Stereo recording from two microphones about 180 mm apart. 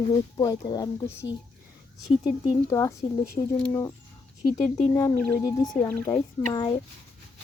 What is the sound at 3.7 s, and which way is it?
Speech, 15° left (ahead or behind).